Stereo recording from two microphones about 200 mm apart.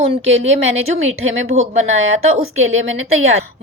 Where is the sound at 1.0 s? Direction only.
90° right.